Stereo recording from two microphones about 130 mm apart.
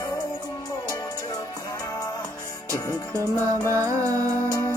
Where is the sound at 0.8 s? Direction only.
30° left (ahead or behind).